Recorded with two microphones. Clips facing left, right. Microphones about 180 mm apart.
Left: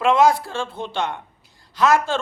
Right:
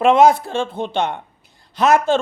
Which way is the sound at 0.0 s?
20° right (ahead or behind).